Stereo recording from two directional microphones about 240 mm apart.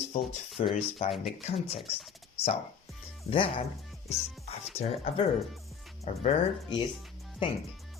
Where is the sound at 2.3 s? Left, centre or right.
Left.